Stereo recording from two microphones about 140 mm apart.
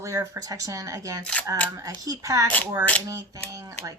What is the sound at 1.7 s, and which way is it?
Speech, 25° right (ahead or behind).